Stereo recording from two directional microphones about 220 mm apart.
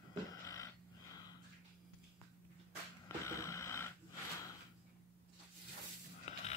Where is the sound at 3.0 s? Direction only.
15° left (ahead or behind).